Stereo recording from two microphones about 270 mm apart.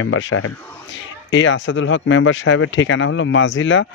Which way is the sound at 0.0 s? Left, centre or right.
Left.